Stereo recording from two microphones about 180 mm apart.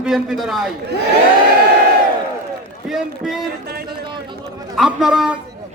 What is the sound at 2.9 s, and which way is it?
Speech, centre (ahead or behind).